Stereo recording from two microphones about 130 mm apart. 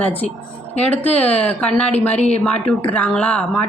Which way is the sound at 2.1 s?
55° left (ahead or behind).